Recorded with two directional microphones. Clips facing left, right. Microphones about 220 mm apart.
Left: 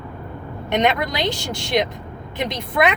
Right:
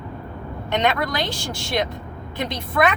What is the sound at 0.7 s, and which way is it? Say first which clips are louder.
Speech: left 2 dB; 20° left (ahead or behind).